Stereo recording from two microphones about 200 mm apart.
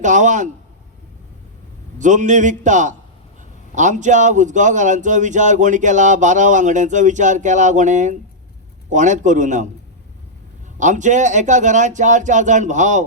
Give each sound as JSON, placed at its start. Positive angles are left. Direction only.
{"t": 0.0, "sound": "speech", "side_deg": -40}
{"t": 2.0, "sound": "speech", "side_deg": -40}
{"t": 10.8, "sound": "speech", "side_deg": -40}